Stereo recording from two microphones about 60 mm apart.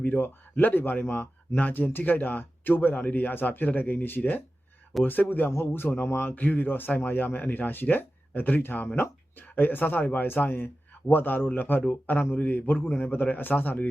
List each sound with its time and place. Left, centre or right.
0.0 s speech: left
4.9 s speech: centre
5.5 s speech: left
6.3 s a man's voice: left